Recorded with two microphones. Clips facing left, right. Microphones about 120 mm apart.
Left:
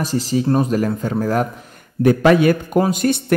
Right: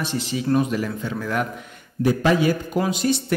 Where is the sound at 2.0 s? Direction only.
60° left (ahead or behind).